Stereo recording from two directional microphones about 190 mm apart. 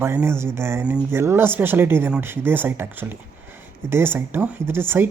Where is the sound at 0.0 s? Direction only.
10° right (ahead or behind).